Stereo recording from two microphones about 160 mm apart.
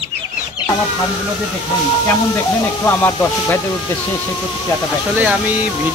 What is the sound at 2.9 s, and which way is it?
Speech, 15° left (ahead or behind).